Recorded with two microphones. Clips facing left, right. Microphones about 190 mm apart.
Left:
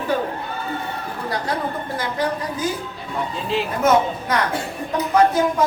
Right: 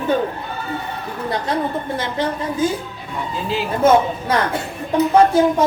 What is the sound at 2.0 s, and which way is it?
Speech, 25° right (ahead or behind).